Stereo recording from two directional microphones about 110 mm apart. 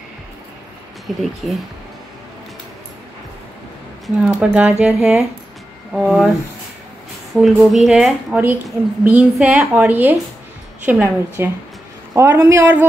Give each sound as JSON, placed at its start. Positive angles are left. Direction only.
{"t": 1.0, "sound": "speech", "side_deg": 0}
{"t": 4.2, "sound": "a woman's voice", "side_deg": -10}
{"t": 7.3, "sound": "a woman's voice", "side_deg": 0}